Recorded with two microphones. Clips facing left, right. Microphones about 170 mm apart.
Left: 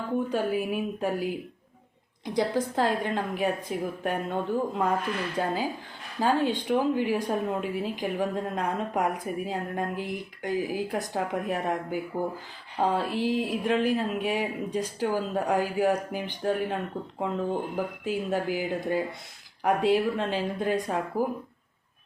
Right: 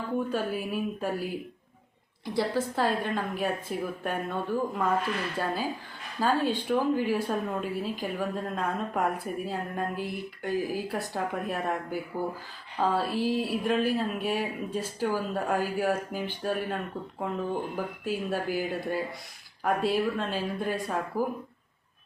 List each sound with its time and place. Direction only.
0.3 s speech: 15° left (ahead or behind)